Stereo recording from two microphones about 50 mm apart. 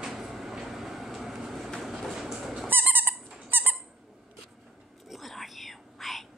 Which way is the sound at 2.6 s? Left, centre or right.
Right.